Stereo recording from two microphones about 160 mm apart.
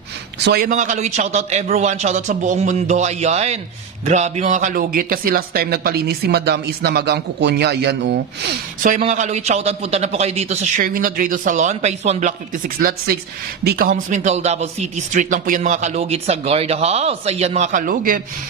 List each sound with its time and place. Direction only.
0.4 s a man's voice: 85° right
0.7 s a man's voice: 50° right (ahead or behind); by 8.5 s 85° right
8.8 s a man's voice: 50° right (ahead or behind)
10.8 s a man's voice: 60° right (ahead or behind)